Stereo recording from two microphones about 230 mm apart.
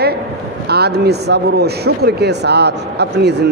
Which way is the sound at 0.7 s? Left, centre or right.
Right.